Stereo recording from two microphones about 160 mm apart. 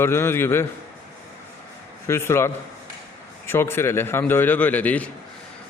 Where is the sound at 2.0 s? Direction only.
15° left (ahead or behind).